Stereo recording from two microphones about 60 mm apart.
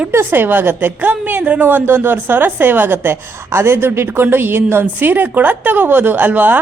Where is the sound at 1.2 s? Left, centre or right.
Right.